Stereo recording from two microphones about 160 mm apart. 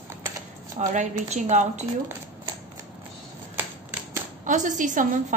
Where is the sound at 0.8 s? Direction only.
50° right (ahead or behind).